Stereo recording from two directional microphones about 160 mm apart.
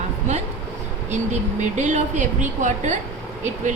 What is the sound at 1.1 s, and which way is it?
Speech, 45° right (ahead or behind).